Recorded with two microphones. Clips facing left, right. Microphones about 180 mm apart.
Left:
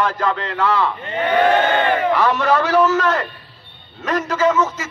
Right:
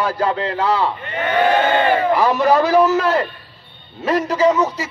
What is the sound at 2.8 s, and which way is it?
Speech, 35° right (ahead or behind).